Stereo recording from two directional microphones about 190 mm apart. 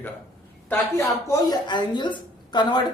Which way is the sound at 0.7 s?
15° left (ahead or behind).